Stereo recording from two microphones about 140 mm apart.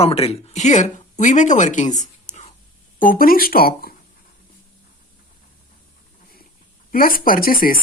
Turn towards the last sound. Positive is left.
turn(degrees=90)